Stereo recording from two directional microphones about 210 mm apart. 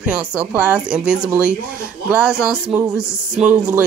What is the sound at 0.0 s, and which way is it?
Speech, 5° right (ahead or behind).